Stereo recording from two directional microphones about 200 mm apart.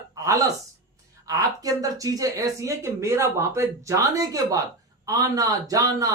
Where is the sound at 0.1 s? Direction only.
15° right (ahead or behind).